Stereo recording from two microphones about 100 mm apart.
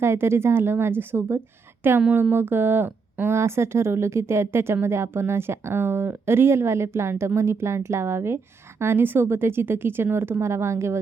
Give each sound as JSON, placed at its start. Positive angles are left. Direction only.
{"t": 0.0, "sound": "speech", "side_deg": -25}
{"t": 2.0, "sound": "speech", "side_deg": -10}
{"t": 2.3, "sound": "speech", "side_deg": -20}